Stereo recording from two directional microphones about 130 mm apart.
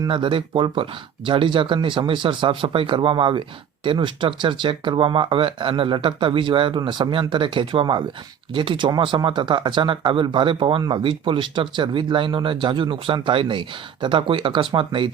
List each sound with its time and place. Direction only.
0.0 s speech: 40° right (ahead or behind)